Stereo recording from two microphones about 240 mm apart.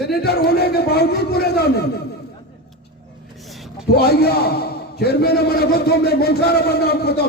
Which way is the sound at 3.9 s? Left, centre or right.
Left.